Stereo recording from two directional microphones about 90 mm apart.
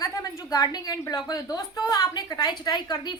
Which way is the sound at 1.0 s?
40° left (ahead or behind).